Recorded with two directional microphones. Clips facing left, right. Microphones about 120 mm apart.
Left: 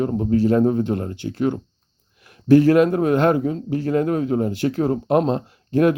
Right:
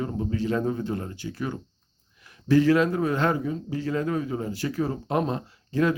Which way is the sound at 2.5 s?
55° left (ahead or behind).